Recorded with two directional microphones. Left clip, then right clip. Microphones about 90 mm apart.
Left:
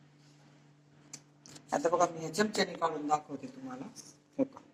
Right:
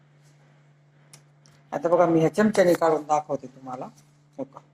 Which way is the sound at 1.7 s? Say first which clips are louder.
Right 8 dB; 40° right (ahead or behind).